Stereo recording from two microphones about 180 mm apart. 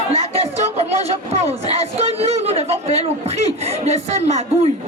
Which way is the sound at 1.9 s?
35° right (ahead or behind).